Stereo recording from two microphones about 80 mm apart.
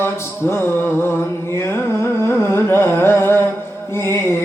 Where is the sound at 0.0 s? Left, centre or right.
Left.